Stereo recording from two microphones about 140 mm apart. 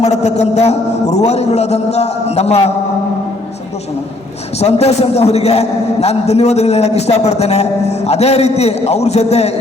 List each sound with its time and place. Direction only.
0.0 s a man's voice: 50° left (ahead or behind)
4.6 s a man's voice: 50° left (ahead or behind)